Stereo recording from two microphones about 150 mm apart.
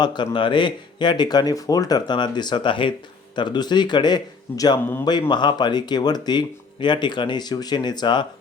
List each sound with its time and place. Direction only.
0.0 s speech: 30° left (ahead or behind)